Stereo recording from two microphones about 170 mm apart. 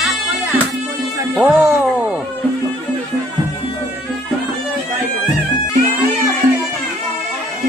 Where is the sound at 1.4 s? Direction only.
5° right (ahead or behind).